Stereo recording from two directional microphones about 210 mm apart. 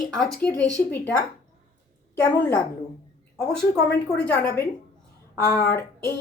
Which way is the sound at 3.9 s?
5° left (ahead or behind).